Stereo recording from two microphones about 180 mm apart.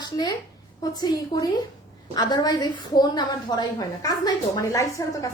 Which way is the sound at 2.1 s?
20° left (ahead or behind).